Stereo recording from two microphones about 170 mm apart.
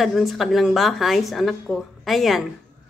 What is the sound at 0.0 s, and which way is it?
A woman's voice, centre (ahead or behind).